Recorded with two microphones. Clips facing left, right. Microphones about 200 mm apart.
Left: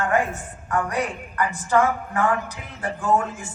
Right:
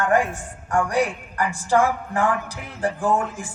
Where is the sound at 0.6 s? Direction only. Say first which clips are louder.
Right 3 dB; 30° right (ahead or behind).